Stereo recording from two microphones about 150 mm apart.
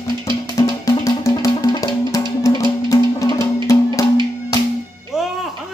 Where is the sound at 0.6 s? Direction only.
20° left (ahead or behind).